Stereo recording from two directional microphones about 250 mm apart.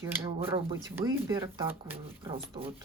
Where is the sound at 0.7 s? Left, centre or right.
Centre.